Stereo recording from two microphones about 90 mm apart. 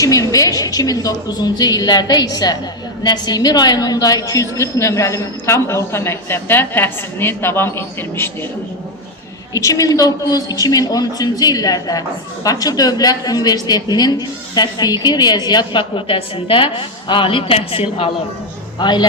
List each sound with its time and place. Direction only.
0.0 s a woman's voice: 40° left (ahead or behind)
9.5 s a woman's voice: 40° left (ahead or behind); by 18.1 s 90° left
18.8 s speech: 55° left (ahead or behind)